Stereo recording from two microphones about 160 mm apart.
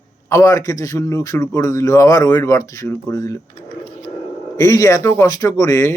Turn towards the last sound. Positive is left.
turn(degrees=20)  # may be behind; listen again after turning